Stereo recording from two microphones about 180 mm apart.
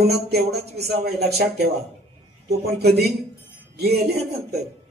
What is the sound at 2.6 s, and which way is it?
Speech, 65° right (ahead or behind).